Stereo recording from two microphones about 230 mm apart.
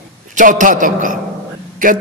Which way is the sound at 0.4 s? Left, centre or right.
Right.